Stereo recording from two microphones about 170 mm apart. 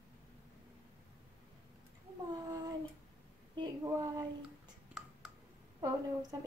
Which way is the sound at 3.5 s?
20° right (ahead or behind).